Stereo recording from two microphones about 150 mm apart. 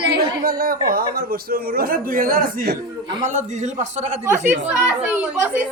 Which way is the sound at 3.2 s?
55° right (ahead or behind).